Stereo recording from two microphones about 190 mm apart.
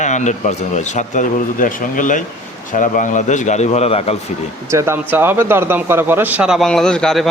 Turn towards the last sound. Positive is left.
turn(degrees=0)  # may be behind; listen again after turning